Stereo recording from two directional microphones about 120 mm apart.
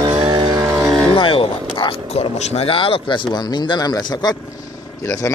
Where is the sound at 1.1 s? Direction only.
50° left (ahead or behind).